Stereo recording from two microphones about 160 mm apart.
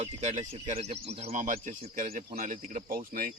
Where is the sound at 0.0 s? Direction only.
45° right (ahead or behind).